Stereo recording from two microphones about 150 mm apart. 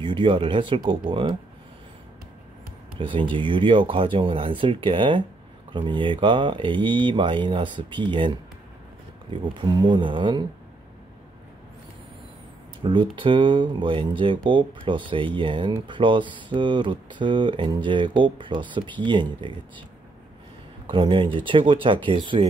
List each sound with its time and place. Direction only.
0.0 s speech: 35° right (ahead or behind)
3.0 s speech: 35° right (ahead or behind)
9.3 s speech: 35° right (ahead or behind)
12.8 s speech: 35° right (ahead or behind)
20.9 s speech: 35° right (ahead or behind)